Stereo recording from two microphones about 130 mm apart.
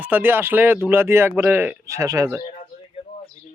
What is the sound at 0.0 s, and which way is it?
Speech, 15° right (ahead or behind).